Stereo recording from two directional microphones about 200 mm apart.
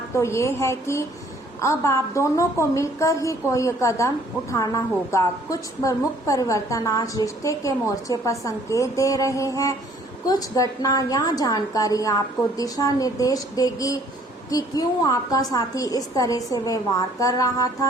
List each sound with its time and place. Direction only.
0.1 s a woman's voice: 15° left (ahead or behind)